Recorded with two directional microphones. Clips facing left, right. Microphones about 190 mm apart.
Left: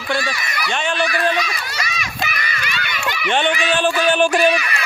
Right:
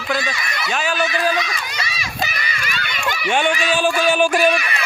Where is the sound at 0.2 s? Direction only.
20° right (ahead or behind).